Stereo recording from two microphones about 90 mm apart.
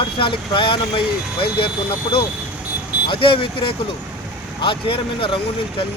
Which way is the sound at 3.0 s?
70° left (ahead or behind).